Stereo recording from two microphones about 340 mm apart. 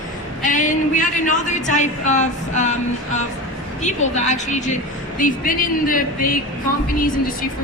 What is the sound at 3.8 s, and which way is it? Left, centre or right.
A woman's voice, left.